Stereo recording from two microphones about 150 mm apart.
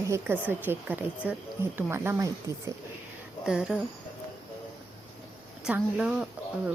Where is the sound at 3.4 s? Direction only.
5° right (ahead or behind).